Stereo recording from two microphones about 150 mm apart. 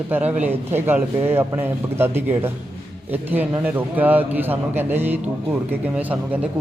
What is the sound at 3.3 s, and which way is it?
A man's voice, 10° right (ahead or behind).